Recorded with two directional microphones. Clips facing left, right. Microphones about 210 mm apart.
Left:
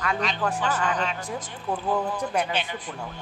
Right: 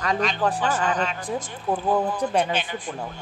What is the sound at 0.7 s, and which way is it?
Speech, 50° right (ahead or behind).